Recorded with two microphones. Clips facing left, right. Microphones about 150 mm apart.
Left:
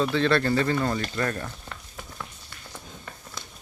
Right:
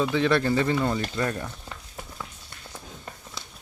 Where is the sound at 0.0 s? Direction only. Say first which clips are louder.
Even; 15° right (ahead or behind).